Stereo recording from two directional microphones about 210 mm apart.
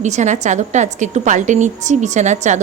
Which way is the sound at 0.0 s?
35° right (ahead or behind).